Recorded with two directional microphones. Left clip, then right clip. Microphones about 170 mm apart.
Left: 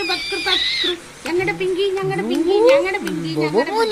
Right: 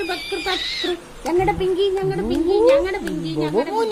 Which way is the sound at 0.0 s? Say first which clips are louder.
Left 3 dB; 15° right (ahead or behind).